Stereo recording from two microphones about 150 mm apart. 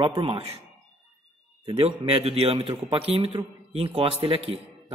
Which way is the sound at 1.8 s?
40° right (ahead or behind).